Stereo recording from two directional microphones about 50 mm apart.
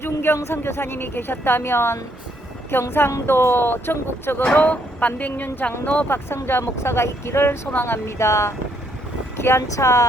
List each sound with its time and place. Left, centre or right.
0.0 s a woman's voice: left
4.5 s speech: left
6.1 s a woman's voice: left